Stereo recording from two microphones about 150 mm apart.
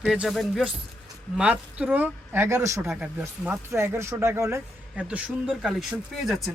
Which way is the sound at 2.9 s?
10° right (ahead or behind).